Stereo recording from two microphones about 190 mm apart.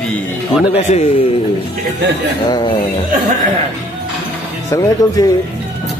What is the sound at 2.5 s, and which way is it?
Speech, 25° left (ahead or behind).